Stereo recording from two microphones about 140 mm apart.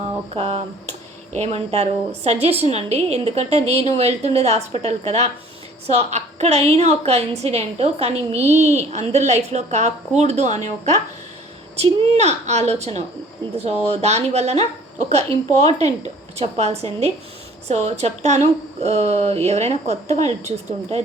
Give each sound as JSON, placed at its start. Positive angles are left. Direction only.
{"t": 0.0, "sound": "a woman's voice", "side_deg": -45}